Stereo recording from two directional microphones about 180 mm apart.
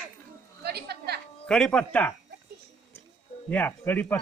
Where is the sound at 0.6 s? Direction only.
65° right (ahead or behind).